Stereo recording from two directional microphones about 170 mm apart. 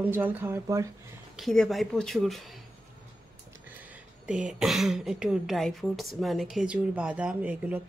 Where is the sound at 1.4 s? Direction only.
Centre (ahead or behind).